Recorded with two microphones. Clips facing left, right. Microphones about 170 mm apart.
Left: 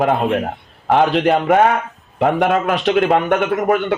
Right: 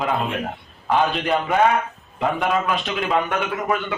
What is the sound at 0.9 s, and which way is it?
A man's voice, 75° left (ahead or behind).